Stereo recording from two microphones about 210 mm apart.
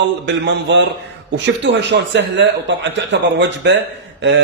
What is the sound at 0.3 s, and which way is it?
A man's voice, 60° right (ahead or behind).